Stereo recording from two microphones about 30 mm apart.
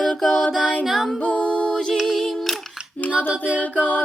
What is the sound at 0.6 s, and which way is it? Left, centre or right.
A capella, left.